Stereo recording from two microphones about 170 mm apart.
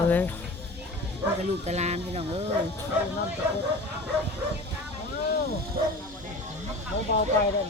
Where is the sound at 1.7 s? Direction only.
40° right (ahead or behind).